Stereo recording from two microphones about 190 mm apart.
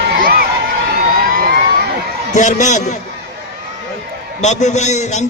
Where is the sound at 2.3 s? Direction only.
40° left (ahead or behind).